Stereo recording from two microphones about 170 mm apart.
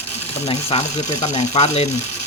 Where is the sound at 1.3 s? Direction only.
40° left (ahead or behind).